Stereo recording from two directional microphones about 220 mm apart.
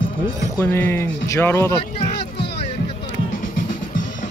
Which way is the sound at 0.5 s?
10° left (ahead or behind).